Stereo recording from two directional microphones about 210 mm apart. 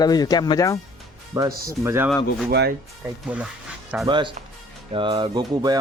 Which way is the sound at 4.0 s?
20° right (ahead or behind).